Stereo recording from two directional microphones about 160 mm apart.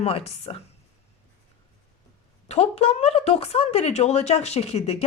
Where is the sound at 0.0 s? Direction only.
40° left (ahead or behind).